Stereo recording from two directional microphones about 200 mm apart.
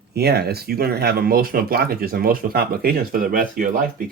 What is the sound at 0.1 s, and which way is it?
Speech, 50° right (ahead or behind).